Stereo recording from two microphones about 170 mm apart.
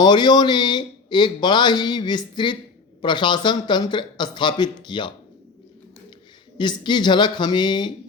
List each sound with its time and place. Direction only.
0.0 s speech: 25° left (ahead or behind)
6.6 s speech: 25° left (ahead or behind)